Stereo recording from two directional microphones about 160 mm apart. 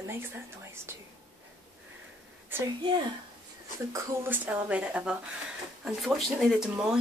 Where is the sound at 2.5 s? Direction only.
25° right (ahead or behind).